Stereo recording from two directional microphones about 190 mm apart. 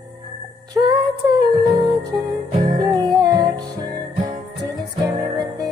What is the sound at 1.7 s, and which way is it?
Music, 20° right (ahead or behind).